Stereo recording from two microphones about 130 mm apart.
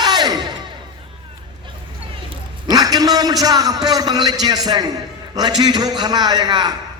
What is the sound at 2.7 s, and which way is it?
A man's voice, 30° right (ahead or behind).